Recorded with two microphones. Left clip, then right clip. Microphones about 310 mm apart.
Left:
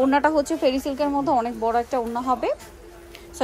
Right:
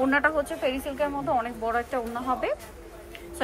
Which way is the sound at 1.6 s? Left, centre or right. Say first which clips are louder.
Left 5 dB; centre.